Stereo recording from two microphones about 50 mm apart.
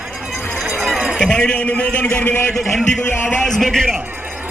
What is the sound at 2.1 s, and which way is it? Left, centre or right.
Speech, left.